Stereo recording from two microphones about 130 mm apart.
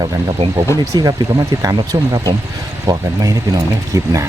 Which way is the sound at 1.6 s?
30° right (ahead or behind).